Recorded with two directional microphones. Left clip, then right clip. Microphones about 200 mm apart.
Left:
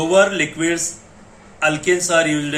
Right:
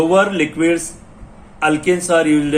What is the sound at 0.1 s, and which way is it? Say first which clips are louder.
Speech: even; 30° right (ahead or behind).